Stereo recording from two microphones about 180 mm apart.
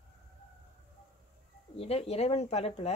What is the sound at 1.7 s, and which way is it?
Speech, 35° left (ahead or behind).